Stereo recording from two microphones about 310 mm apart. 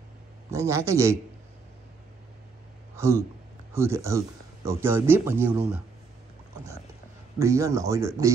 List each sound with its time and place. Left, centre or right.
0.5 s speech: centre
3.0 s speech: centre
7.3 s speech: centre